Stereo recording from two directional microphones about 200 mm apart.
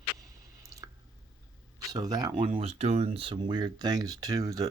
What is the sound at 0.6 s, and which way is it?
Squish, 15° right (ahead or behind).